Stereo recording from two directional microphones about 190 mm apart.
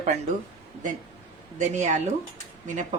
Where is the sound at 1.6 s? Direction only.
40° right (ahead or behind).